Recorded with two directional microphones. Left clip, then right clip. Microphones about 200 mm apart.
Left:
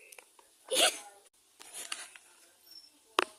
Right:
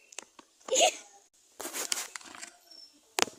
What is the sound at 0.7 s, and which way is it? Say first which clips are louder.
Speech: right 3 dB; 15° left (ahead or behind).